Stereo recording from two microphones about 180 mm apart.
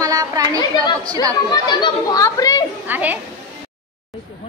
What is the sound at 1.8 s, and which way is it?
Speech, 20° left (ahead or behind).